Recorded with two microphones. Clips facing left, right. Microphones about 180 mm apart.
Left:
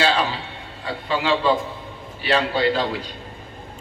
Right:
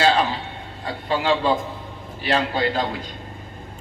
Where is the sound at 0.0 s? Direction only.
50° right (ahead or behind).